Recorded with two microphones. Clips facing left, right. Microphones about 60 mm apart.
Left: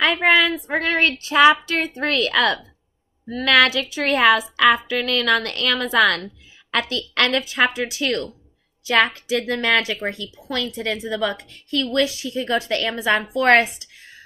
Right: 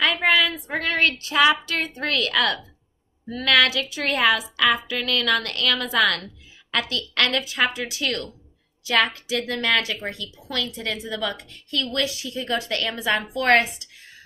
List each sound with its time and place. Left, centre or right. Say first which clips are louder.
0.0 s a woman's voice: left 3 dB; left